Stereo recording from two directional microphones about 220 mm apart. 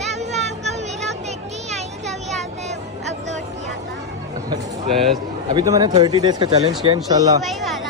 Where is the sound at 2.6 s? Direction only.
30° right (ahead or behind).